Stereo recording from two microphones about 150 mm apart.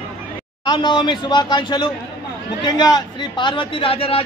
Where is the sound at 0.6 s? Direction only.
30° left (ahead or behind).